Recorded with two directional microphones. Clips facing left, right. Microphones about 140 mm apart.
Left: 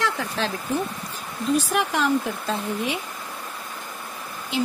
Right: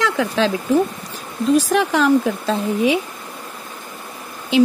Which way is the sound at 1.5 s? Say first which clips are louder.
Right 6 dB; 90° right.